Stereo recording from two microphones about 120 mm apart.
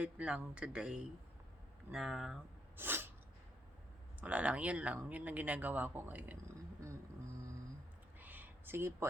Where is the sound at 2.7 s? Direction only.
15° right (ahead or behind).